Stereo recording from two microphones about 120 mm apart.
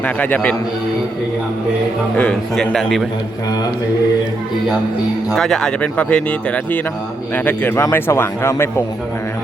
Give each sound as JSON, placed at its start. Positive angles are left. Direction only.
{"t": 0.0, "sound": "speech", "side_deg": 15}
{"t": 2.1, "sound": "a man's voice", "side_deg": 10}
{"t": 5.3, "sound": "speech", "side_deg": 5}